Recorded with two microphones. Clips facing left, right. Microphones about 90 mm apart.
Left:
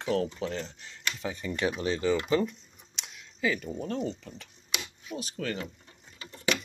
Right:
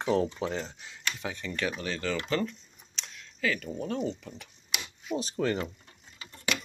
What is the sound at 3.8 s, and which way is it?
Speech, 5° right (ahead or behind).